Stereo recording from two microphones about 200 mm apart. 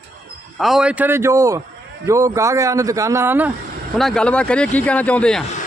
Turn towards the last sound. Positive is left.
turn(degrees=5)  # may be behind; listen again after turning